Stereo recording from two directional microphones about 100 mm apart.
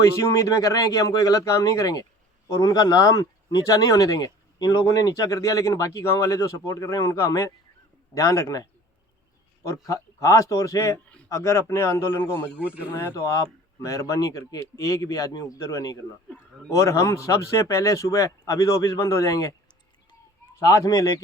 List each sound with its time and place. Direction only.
0.0 s speech: 35° left (ahead or behind)
9.6 s speech: 35° left (ahead or behind)
10.9 s a sound: 15° left (ahead or behind)
11.3 s a man's voice: 30° left (ahead or behind)
12.5 s speech: 15° right (ahead or behind)
13.1 s speech: 30° left (ahead or behind)
20.6 s speech: 35° left (ahead or behind)